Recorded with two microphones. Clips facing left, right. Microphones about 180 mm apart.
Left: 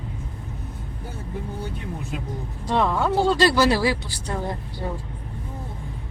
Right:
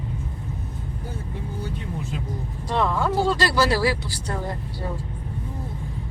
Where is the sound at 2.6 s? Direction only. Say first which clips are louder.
Left 1 dB; 20° left (ahead or behind).